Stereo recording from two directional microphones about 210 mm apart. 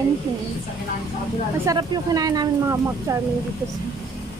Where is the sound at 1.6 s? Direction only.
20° right (ahead or behind).